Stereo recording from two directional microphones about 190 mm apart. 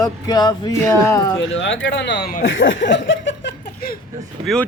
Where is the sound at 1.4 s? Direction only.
75° left (ahead or behind).